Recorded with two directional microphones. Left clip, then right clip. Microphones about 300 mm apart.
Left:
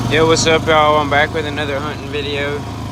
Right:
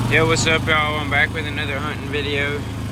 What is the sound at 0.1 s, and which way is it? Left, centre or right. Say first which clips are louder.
Speech: left 5 dB; centre.